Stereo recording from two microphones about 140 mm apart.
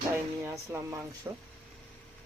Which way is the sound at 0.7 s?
20° right (ahead or behind).